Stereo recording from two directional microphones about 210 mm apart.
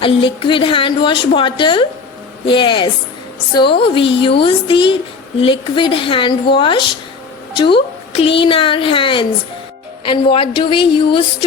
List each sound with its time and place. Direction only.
0.0 s a woman's voice: 25° left (ahead or behind)